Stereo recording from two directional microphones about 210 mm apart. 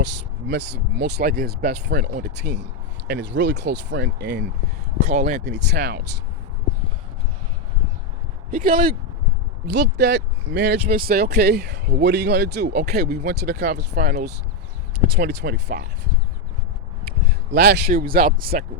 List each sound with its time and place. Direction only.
0.0 s speech: 55° right (ahead or behind)
5.0 s speech: 35° right (ahead or behind)
5.5 s speech: 55° right (ahead or behind)
8.4 s speech: 40° right (ahead or behind)
9.7 s speech: 55° right (ahead or behind)
17.1 s speech: 50° right (ahead or behind)